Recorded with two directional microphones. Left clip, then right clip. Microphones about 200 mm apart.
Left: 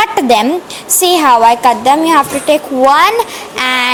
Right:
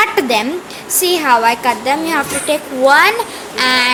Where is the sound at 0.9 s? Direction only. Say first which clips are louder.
Left 5 dB; 35° left (ahead or behind).